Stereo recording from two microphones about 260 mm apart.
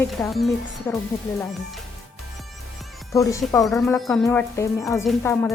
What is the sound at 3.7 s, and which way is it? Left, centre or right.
A woman's voice, centre.